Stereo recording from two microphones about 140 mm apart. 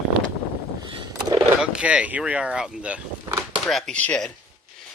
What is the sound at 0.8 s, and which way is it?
Vehicle, 30° right (ahead or behind).